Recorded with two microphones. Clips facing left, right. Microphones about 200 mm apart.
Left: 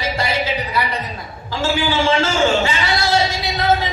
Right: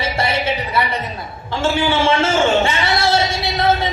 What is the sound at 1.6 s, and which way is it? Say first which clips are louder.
A man's voice: right 2 dB; 25° right (ahead or behind).